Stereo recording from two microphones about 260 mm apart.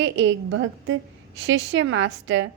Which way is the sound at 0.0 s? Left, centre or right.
Right.